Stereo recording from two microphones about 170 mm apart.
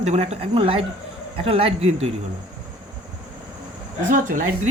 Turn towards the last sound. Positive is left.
turn(degrees=-50)  # may be behind; listen again after turning